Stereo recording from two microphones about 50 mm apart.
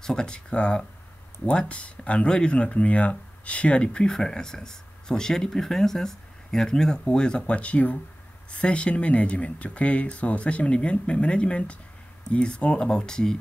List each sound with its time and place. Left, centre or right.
0.0 s speech: centre